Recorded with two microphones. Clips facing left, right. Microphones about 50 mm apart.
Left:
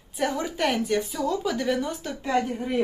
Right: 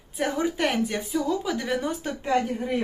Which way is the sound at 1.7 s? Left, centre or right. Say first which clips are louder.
Even; right.